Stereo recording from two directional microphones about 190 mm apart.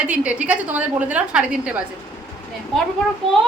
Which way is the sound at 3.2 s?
30° right (ahead or behind).